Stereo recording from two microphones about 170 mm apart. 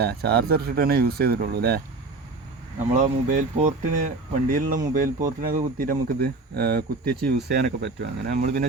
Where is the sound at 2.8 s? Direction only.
45° right (ahead or behind); by 7.3 s 65° right (ahead or behind).